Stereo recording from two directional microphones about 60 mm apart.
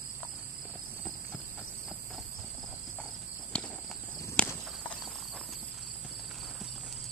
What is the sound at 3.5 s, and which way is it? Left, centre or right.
Walk, centre.